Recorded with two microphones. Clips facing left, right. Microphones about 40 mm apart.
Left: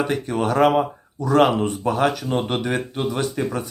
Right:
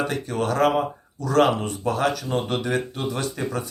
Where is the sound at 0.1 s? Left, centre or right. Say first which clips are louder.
Left 3 dB; left.